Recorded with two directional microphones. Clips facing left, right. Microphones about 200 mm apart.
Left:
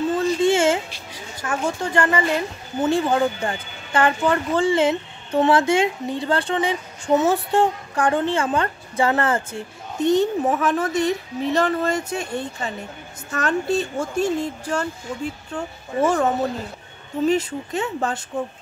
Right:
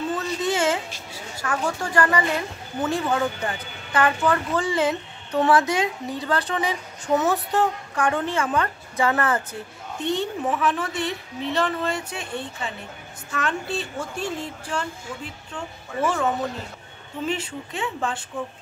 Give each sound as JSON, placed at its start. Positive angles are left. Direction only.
{"t": 0.2, "sound": "a sound", "side_deg": 30}
{"t": 1.1, "sound": "a woman's voice", "side_deg": 20}
{"t": 9.9, "sound": "speech", "side_deg": 45}